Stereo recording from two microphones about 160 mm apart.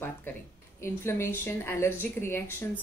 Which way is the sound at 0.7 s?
15° left (ahead or behind).